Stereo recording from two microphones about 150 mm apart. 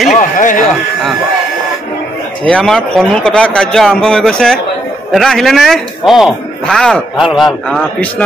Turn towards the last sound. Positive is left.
turn(degrees=0)  # may be behind; listen again after turning